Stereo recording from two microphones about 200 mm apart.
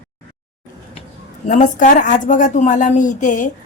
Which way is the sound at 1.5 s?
40° left (ahead or behind).